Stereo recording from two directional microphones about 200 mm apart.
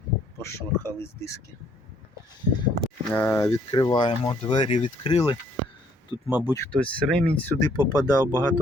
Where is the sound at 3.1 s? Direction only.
10° left (ahead or behind); by 5.3 s 25° left (ahead or behind).